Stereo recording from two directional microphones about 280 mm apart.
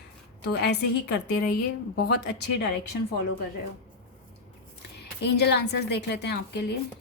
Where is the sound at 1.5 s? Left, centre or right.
Left.